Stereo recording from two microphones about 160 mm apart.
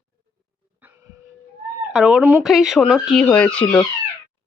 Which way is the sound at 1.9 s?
5° right (ahead or behind).